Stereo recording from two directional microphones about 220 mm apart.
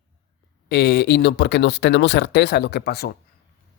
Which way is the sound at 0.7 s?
50° left (ahead or behind).